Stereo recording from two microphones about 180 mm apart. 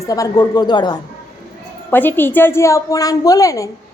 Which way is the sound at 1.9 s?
10° left (ahead or behind).